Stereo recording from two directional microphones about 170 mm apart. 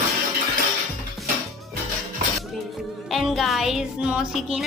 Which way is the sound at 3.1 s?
Centre (ahead or behind).